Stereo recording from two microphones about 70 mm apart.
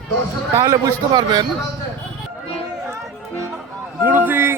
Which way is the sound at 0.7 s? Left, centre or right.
Right.